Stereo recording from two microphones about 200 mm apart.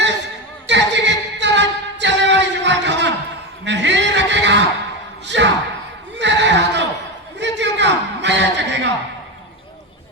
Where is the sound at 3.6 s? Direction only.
60° right (ahead or behind).